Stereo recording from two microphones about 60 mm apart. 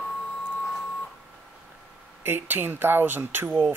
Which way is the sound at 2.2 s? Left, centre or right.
Right.